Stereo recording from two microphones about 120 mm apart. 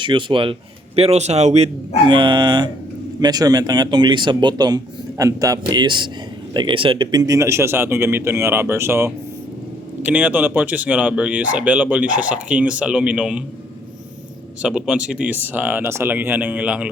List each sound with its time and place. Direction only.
0.0 s a man's voice: 45° right (ahead or behind)
0.9 s speech: 60° right (ahead or behind)
2.0 s a man's voice: 40° right (ahead or behind)
5.8 s a man's voice: 40° right (ahead or behind); by 13.4 s 10° right (ahead or behind)
14.6 s speech: 5° right (ahead or behind)